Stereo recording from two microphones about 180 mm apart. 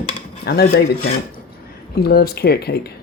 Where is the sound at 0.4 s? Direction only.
60° left (ahead or behind).